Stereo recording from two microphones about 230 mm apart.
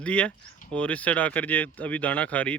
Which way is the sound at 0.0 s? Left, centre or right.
Centre.